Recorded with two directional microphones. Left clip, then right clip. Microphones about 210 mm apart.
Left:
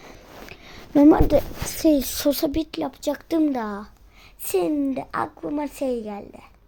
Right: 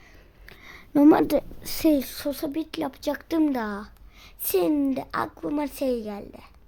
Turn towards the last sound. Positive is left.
turn(degrees=0)  # may be behind; listen again after turning